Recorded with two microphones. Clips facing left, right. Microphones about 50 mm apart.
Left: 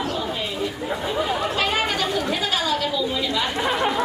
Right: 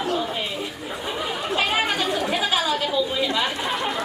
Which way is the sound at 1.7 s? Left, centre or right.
Centre.